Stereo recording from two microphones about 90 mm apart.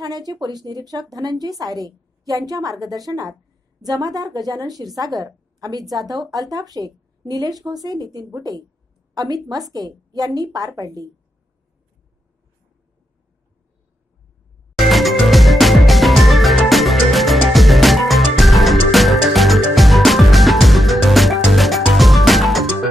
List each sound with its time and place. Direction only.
0.0 s a woman's voice: 45° right (ahead or behind)
14.8 s music: centre (ahead or behind)